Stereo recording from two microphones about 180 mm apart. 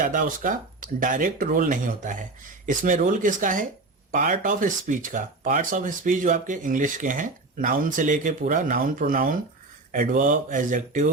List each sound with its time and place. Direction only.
0.0 s speech: 50° right (ahead or behind)